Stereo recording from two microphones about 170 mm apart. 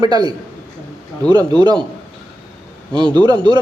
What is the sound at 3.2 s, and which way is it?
Speech, 25° right (ahead or behind).